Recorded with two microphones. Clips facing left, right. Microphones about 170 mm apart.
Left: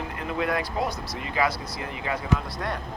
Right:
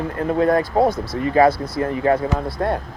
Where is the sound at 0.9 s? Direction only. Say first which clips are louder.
Right 12 dB; 55° right (ahead or behind).